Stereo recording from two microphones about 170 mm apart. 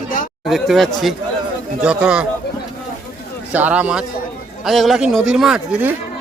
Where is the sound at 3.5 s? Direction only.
10° right (ahead or behind).